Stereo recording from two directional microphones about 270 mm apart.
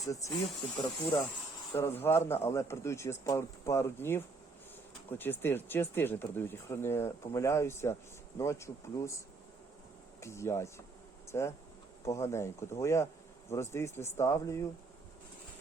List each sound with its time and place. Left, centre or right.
0.1 s speech: centre
10.2 s speech: centre